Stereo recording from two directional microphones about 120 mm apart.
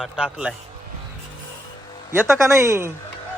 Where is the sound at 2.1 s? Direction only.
20° right (ahead or behind).